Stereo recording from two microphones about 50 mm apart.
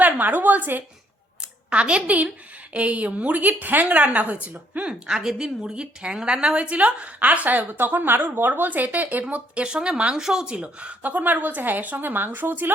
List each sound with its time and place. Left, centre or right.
0.0 s a woman's voice: right
1.7 s a woman's voice: right
4.9 s a woman's voice: centre; by 9.2 s right
9.3 s speech: right